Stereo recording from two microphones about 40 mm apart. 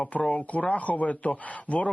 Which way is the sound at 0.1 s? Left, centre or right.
Left.